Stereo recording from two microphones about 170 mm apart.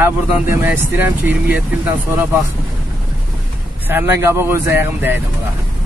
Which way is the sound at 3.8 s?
10° right (ahead or behind).